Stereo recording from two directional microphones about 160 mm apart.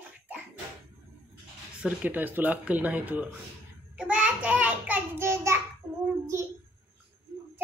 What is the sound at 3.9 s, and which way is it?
Child singing, 5° right (ahead or behind).